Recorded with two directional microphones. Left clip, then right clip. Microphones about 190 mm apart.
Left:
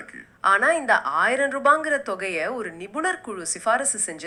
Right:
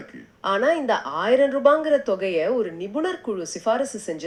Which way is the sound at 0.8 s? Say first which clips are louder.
Left 3 dB; 15° left (ahead or behind).